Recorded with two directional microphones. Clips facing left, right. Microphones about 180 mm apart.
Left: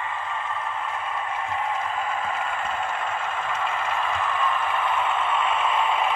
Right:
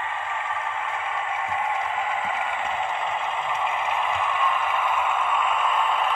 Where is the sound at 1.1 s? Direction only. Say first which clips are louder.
Right 1 dB; 20° right (ahead or behind).